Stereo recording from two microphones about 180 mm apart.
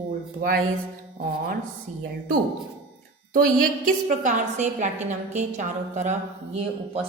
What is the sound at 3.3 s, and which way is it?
A woman's voice, 50° right (ahead or behind).